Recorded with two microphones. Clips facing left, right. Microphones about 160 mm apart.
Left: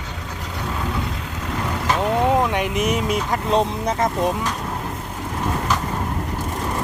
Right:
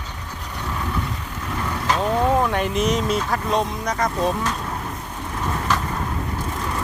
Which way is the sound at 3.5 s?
30° left (ahead or behind).